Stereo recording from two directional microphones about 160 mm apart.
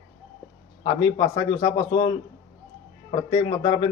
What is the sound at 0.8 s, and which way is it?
A man's voice, 25° left (ahead or behind).